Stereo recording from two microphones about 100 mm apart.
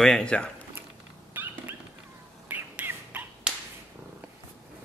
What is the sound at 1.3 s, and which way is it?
Dog, 20° right (ahead or behind).